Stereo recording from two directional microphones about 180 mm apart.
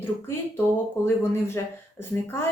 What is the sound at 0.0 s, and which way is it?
A woman's voice, 10° left (ahead or behind).